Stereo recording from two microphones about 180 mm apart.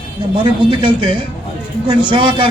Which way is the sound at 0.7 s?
25° right (ahead or behind).